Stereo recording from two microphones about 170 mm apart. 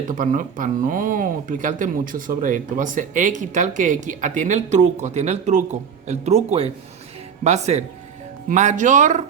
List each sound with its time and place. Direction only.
0.1 s speech: 50° right (ahead or behind)